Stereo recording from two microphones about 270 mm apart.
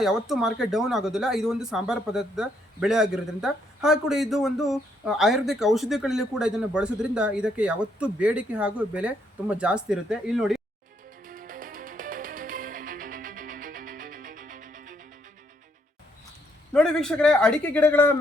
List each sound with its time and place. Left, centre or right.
0.0 s speech: centre
11.3 s music: right
16.7 s speech: centre